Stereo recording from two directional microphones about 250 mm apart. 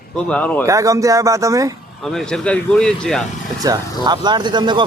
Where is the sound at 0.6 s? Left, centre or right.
Centre.